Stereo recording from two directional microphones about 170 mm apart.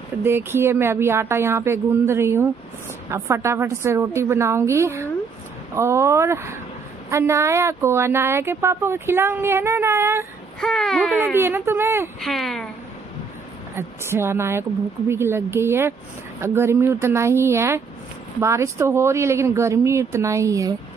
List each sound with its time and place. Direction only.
0.2 s speech: 15° right (ahead or behind)
10.6 s speech: 5° left (ahead or behind)
11.3 s speech: 15° right (ahead or behind)
12.2 s speech: centre (ahead or behind)
13.7 s speech: 15° right (ahead or behind)